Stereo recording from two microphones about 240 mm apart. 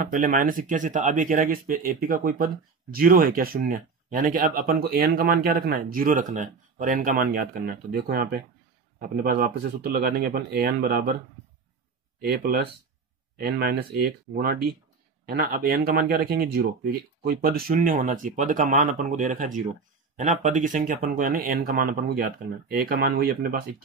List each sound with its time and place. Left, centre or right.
0.0 s speech: right
9.9 s speech: right
12.2 s speech: right